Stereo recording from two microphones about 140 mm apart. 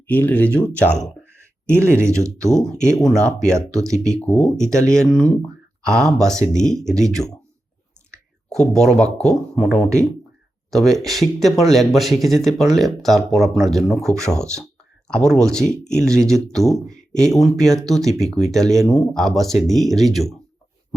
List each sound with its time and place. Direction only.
0.1 s speech: 10° left (ahead or behind)
2.0 s speech: 20° right (ahead or behind)
2.5 s speech: 5° left (ahead or behind)
8.5 s speech: 5° left (ahead or behind)
14.6 s a sound: 5° left (ahead or behind)
15.5 s speech: 5° left (ahead or behind)